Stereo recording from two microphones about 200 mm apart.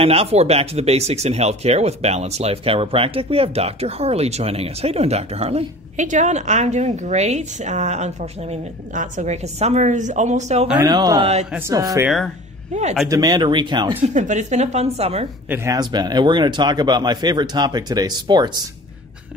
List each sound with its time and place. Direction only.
0.0 s speech: 30° right (ahead or behind)
10.7 s speech: 15° right (ahead or behind)
13.1 s speech: 20° right (ahead or behind)
14.0 s speech: 35° right (ahead or behind)
15.5 s speech: 15° right (ahead or behind)